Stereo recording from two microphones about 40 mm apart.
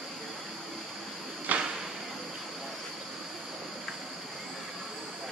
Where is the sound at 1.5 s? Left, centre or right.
Right.